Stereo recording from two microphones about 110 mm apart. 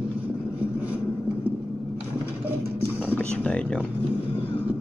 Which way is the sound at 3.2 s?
10° left (ahead or behind).